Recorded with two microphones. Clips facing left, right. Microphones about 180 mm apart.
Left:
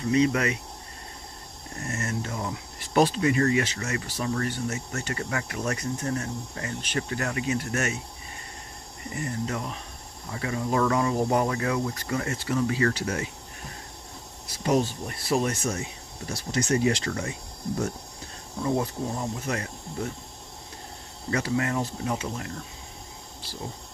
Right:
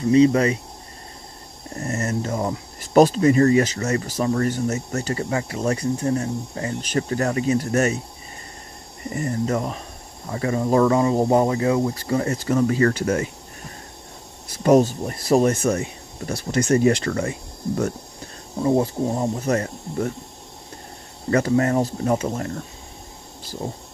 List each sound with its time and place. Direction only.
0.1 s speech: 30° right (ahead or behind)
1.8 s speech: 40° right (ahead or behind)
9.1 s speech: 45° right (ahead or behind)
14.5 s speech: 50° right (ahead or behind)
18.6 s speech: 30° right (ahead or behind); by 20.1 s 45° right (ahead or behind)
21.3 s speech: 45° right (ahead or behind)